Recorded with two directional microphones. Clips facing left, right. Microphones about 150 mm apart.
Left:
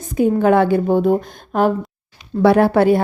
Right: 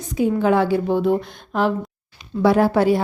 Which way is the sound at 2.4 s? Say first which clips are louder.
Left 3 dB; 60° left (ahead or behind).